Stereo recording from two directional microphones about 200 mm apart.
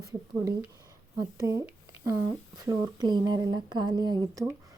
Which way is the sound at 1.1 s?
15° right (ahead or behind).